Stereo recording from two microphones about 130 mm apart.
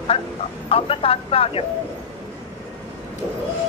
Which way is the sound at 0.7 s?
45° left (ahead or behind).